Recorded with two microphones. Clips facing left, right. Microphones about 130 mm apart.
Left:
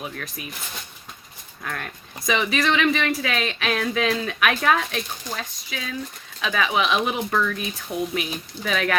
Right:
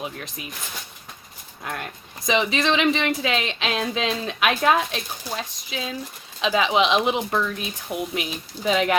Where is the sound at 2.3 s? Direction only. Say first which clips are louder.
Right 1 dB; 25° right (ahead or behind).